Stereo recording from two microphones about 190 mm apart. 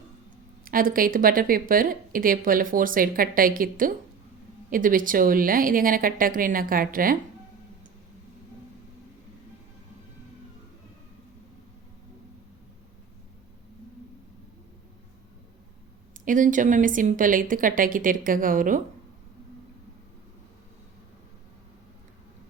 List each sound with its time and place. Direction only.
0.6 s speech: 50° right (ahead or behind)
16.1 s speech: 45° right (ahead or behind)